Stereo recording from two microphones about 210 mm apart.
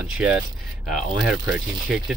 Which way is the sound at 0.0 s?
5° right (ahead or behind).